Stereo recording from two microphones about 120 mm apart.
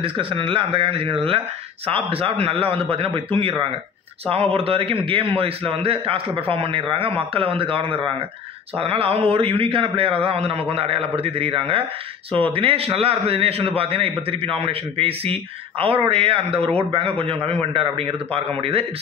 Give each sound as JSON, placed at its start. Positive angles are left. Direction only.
{"t": 0.0, "sound": "a man's voice", "side_deg": -45}